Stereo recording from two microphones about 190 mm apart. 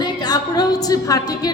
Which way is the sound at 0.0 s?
20° left (ahead or behind).